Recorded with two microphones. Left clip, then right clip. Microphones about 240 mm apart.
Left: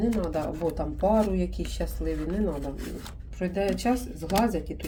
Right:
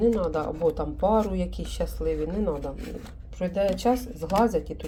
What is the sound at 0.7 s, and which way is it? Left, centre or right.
A woman's voice, centre.